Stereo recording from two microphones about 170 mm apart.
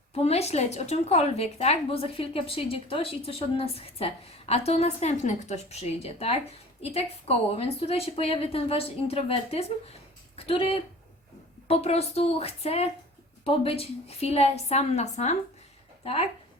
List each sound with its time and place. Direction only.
0.1 s a woman's voice: 35° left (ahead or behind)